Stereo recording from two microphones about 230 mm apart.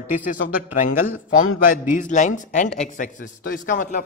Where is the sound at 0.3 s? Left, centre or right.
Left.